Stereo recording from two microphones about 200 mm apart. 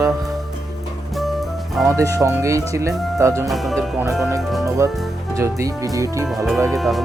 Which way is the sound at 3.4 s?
Centre (ahead or behind).